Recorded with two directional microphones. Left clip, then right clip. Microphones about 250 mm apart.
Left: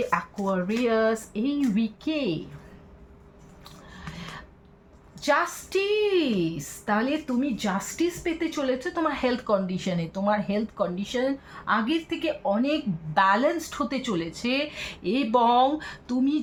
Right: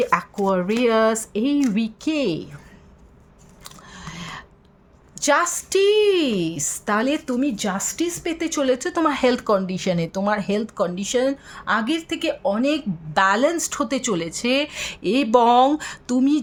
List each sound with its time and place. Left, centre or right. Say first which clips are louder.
0.1 s a woman's voice: right 6 dB; right
3.9 s a sound: right 5 dB; right
5.2 s a woman's voice: right 5 dB; right